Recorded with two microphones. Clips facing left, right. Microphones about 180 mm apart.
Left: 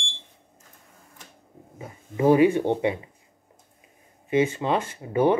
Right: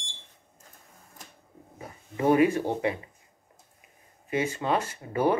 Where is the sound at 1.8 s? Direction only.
25° left (ahead or behind).